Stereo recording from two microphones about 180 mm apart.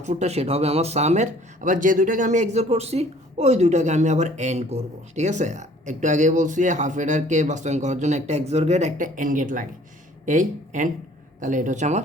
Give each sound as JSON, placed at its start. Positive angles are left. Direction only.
{"t": 0.0, "sound": "speech", "side_deg": -40}